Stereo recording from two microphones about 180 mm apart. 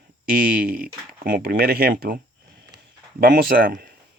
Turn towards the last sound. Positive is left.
turn(degrees=-55)  # may be behind; listen again after turning